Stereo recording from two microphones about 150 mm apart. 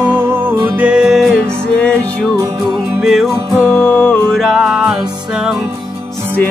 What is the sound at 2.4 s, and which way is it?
Music, 20° right (ahead or behind).